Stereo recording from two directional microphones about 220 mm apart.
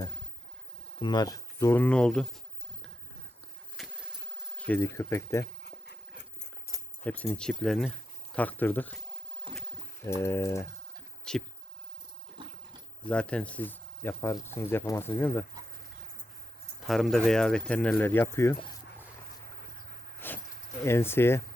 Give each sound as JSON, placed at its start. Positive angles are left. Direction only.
{"t": 0.9, "sound": "speech", "side_deg": 20}
{"t": 3.8, "sound": "a sound", "side_deg": 0}
{"t": 4.5, "sound": "speech", "side_deg": 5}
{"t": 5.6, "sound": "dog", "side_deg": 50}
{"t": 7.0, "sound": "speech", "side_deg": 5}
{"t": 9.5, "sound": "a sound", "side_deg": -25}
{"t": 10.2, "sound": "speech", "side_deg": 10}
{"t": 12.4, "sound": "dog", "side_deg": -20}
{"t": 13.1, "sound": "speech", "side_deg": 5}
{"t": 16.8, "sound": "speech", "side_deg": 0}
{"t": 20.2, "sound": "a sound", "side_deg": 10}
{"t": 20.8, "sound": "speech", "side_deg": 10}